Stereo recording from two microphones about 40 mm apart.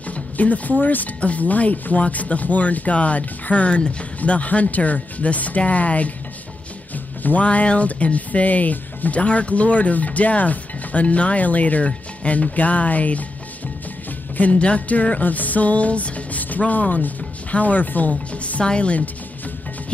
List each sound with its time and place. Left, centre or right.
0.1 s speech: left
7.4 s speech: left
11.8 s speech: left
14.6 s speech: left
18.1 s speech: left